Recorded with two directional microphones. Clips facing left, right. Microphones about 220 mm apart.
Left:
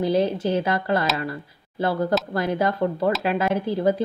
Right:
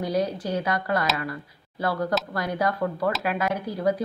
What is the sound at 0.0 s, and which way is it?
Speech, 25° left (ahead or behind).